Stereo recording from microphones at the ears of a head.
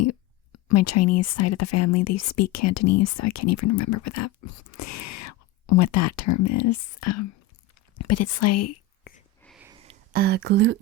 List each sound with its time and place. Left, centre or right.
0.0 s speech: left
7.9 s whispering: left
9.6 s a sound: right